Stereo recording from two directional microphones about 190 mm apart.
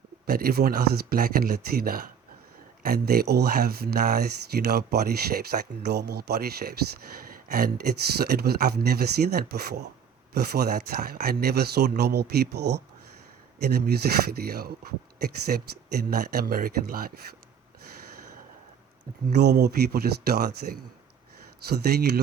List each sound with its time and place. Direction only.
0.3 s speech: 50° right (ahead or behind)
19.3 s speech: 60° right (ahead or behind)